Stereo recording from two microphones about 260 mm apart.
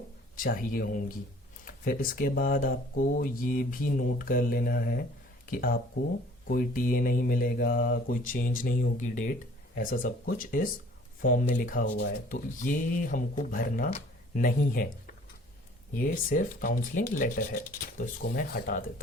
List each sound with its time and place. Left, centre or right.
0.3 s speech: left